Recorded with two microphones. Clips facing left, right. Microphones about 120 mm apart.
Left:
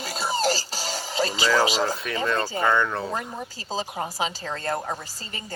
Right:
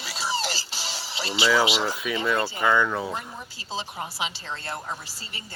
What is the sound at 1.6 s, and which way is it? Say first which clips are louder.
Speech: left 2 dB; 40° left (ahead or behind).